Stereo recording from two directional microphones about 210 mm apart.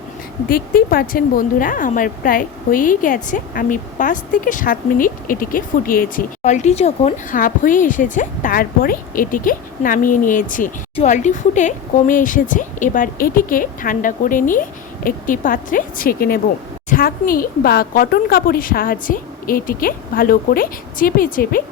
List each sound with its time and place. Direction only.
0.4 s a woman's voice: 45° left (ahead or behind)